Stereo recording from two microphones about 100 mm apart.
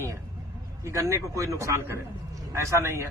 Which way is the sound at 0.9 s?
30° right (ahead or behind).